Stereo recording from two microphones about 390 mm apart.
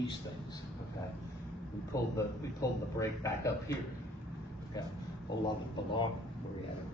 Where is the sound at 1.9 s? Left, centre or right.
Centre.